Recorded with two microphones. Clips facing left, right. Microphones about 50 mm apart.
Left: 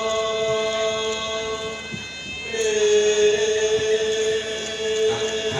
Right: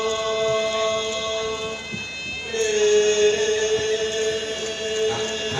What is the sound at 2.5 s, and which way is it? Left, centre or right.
Music, left.